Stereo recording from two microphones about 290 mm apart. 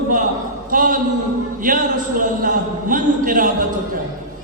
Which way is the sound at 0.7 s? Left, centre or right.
Right.